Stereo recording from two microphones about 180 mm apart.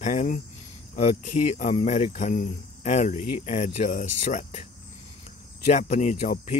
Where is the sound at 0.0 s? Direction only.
45° left (ahead or behind).